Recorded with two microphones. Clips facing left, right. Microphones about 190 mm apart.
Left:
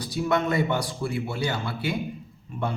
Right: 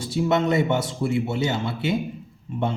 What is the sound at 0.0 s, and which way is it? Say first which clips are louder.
A man's voice: right 3 dB; 25° right (ahead or behind).